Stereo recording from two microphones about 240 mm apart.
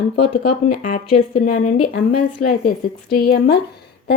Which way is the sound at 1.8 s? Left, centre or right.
Left.